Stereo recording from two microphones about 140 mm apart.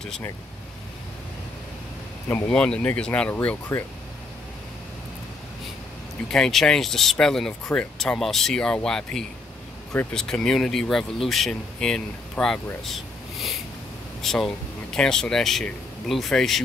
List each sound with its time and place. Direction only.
2.2 s speech: 15° left (ahead or behind)
6.3 s speech: 5° left (ahead or behind)
12.8 s rub: centre (ahead or behind)
14.2 s speech: centre (ahead or behind)